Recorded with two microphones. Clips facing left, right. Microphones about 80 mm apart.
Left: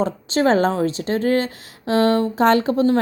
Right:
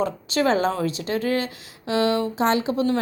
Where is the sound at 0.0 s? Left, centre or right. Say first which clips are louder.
Left 3 dB; left.